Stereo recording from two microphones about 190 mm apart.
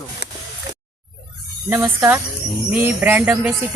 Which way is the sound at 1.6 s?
15° right (ahead or behind).